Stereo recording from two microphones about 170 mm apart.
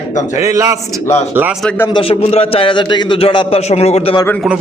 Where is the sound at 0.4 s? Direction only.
20° right (ahead or behind).